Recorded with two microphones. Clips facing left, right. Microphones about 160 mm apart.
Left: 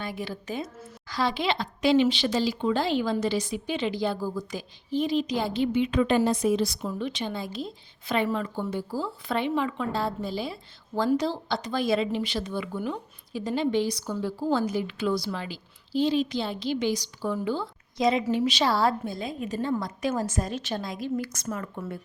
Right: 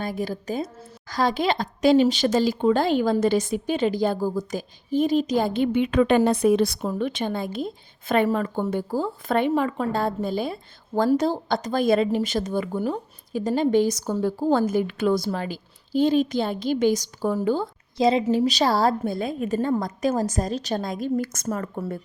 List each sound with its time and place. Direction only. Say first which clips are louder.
0.0 s a woman's voice: right 6 dB; 40° right (ahead or behind)
17.9 s a woman's voice: right 4 dB; 30° right (ahead or behind)
19.0 s a woman's voice: right 6 dB; 55° right (ahead or behind)